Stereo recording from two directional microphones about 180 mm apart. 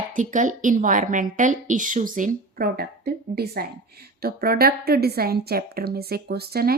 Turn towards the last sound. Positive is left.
turn(degrees=-60)  # may be behind; listen again after turning